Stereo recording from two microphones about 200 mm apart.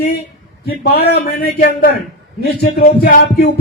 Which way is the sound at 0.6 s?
55° left (ahead or behind).